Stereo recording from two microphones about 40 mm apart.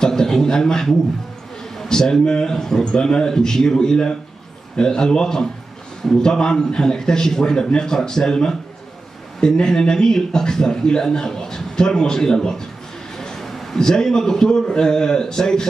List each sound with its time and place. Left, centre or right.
0.0 s a man's voice: centre